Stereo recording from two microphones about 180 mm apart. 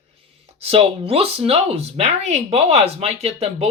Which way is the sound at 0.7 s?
35° right (ahead or behind).